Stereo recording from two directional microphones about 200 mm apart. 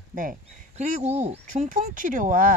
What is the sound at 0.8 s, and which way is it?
Speech, 35° right (ahead or behind).